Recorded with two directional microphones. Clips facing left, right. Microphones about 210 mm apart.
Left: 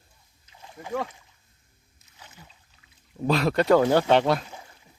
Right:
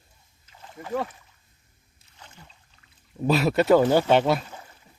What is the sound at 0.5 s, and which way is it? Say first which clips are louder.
Rowboat: right 1 dB; 15° left (ahead or behind).